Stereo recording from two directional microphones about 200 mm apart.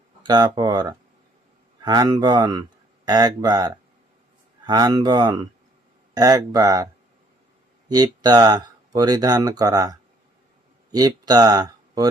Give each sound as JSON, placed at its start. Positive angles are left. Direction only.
{"t": 0.3, "sound": "speech", "side_deg": -20}
{"t": 7.9, "sound": "speech", "side_deg": -20}